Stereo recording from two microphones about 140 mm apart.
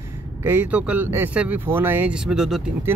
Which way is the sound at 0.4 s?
15° right (ahead or behind).